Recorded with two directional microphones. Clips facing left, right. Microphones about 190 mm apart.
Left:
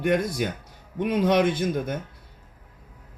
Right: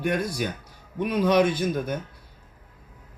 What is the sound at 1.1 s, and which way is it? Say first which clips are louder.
Speech: even; 25° left (ahead or behind).